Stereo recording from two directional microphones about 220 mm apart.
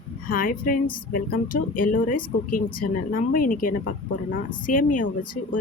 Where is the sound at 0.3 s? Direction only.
40° left (ahead or behind).